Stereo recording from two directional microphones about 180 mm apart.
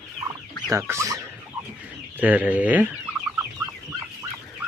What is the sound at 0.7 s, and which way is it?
Speech, 15° right (ahead or behind).